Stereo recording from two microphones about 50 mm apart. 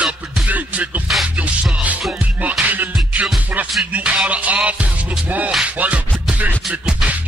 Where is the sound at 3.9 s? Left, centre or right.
Right.